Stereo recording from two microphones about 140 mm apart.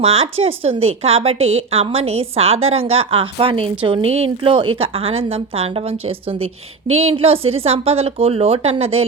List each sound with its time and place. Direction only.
0.0 s a woman's voice: 45° right (ahead or behind)